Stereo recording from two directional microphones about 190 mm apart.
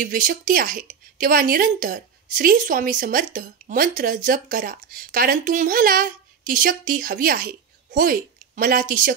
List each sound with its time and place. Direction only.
0.0 s speech: 45° right (ahead or behind)